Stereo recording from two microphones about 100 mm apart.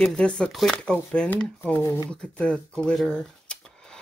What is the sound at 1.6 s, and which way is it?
Speech, 20° left (ahead or behind).